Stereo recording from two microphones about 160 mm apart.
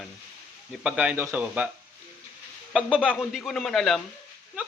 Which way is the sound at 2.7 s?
5° right (ahead or behind).